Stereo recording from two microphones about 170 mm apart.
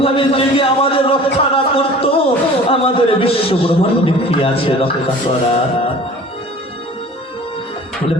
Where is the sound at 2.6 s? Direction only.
35° left (ahead or behind).